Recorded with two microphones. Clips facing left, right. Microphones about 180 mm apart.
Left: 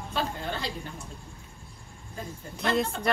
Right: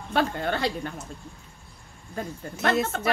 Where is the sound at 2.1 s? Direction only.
65° right (ahead or behind).